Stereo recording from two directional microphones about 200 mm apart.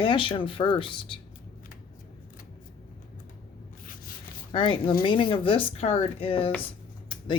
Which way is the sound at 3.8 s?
45° left (ahead or behind).